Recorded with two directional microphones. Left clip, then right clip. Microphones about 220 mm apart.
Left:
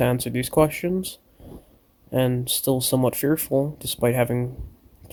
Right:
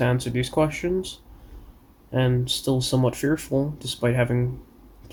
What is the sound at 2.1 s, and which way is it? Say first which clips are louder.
Speech: left 1 dB; 50° left (ahead or behind).